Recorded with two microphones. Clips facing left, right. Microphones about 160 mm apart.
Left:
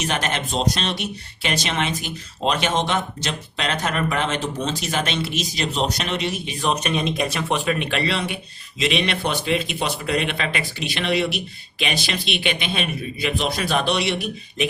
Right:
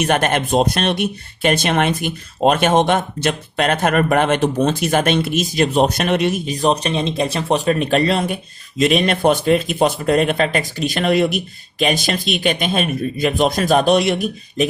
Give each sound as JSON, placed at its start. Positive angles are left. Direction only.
{"t": 0.0, "sound": "speech", "side_deg": -55}